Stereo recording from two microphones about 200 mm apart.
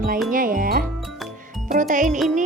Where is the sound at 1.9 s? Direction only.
40° right (ahead or behind).